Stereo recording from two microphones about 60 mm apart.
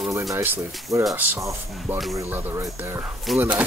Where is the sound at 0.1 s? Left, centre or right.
Right.